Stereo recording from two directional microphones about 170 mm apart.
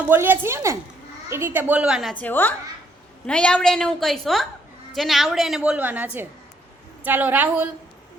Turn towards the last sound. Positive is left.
turn(degrees=-10)  # may be behind; listen again after turning